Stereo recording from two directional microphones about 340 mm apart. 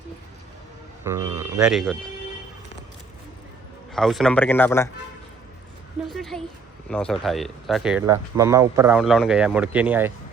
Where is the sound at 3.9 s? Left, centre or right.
Centre.